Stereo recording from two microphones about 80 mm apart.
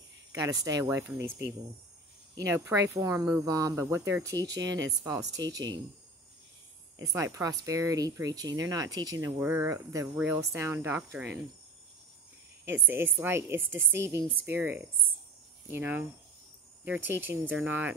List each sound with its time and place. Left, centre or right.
0.3 s speech: right
1.1 s speech: right
3.8 s speech: right
5.4 s speech: right
7.1 s speech: right
9.4 s a woman's voice: right
9.7 s speech: right
10.1 s a woman's voice: right
10.4 s speech: right
12.6 s a woman's voice: right